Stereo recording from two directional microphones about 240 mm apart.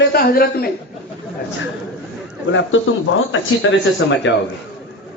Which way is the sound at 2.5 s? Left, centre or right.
Left.